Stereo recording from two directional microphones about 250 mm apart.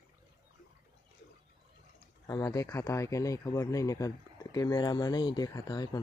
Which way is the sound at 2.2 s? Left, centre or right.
Centre.